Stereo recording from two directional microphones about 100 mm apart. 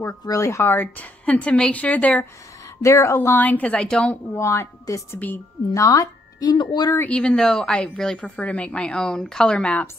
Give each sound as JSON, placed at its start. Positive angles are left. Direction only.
{"t": 0.2, "sound": "a woman's voice", "side_deg": 30}
{"t": 2.8, "sound": "speech", "side_deg": 30}
{"t": 3.2, "sound": "a woman's voice", "side_deg": 20}
{"t": 4.4, "sound": "speech", "side_deg": 30}
{"t": 7.1, "sound": "a woman's voice", "side_deg": 10}